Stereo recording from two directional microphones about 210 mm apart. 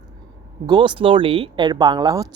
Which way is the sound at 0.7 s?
20° right (ahead or behind).